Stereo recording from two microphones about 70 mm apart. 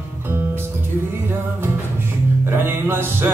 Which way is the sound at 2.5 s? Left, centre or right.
Right.